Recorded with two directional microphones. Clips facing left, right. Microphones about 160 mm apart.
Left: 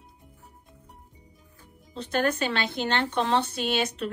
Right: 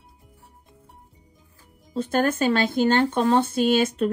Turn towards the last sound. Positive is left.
turn(degrees=-50)  # may be behind; listen again after turning